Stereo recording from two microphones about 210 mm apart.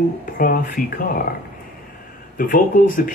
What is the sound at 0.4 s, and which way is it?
Speech, 40° left (ahead or behind).